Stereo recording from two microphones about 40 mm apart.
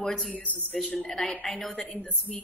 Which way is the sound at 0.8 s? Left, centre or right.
Left.